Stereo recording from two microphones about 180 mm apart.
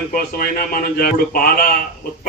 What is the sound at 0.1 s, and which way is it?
A man's voice, 55° left (ahead or behind).